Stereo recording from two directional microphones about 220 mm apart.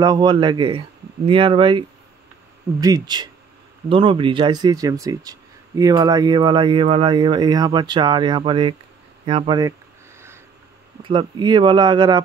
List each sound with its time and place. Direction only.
0.0 s speech: 20° right (ahead or behind)
11.0 s speech: 20° right (ahead or behind)